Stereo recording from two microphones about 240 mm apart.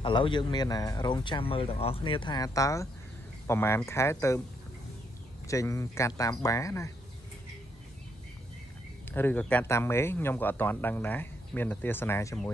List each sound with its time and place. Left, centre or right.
0.0 s speech: left
5.5 s speech: centre
9.1 s speech: centre